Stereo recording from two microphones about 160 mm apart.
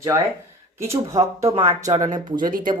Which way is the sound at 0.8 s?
20° right (ahead or behind).